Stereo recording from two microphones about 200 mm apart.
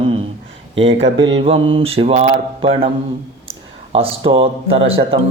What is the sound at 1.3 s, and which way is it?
Mantra, 25° right (ahead or behind).